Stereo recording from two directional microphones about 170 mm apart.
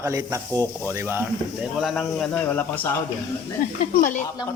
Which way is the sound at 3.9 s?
55° left (ahead or behind).